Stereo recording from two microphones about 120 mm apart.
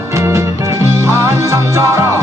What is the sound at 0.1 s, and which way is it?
Music, 25° right (ahead or behind).